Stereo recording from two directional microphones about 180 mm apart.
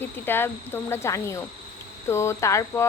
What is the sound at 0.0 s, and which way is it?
Speech, 10° left (ahead or behind).